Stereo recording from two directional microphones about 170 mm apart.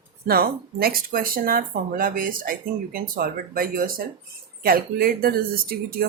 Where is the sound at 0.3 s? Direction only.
60° right (ahead or behind).